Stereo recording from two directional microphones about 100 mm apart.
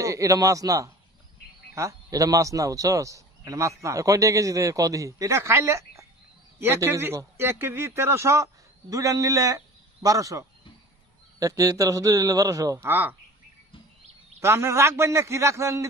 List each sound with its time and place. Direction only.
0.0 s a man's voice: 30° right (ahead or behind)
12.8 s a man's voice: 20° right (ahead or behind)
14.4 s a man's voice: 25° right (ahead or behind)